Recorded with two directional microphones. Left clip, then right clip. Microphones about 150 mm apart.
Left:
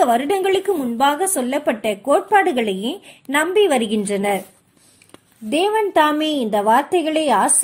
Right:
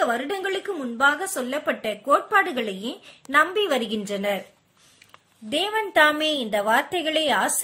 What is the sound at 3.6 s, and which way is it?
Speech, 10° left (ahead or behind).